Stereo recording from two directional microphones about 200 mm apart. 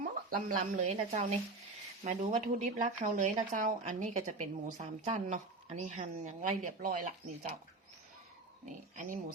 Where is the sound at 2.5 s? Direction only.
40° right (ahead or behind).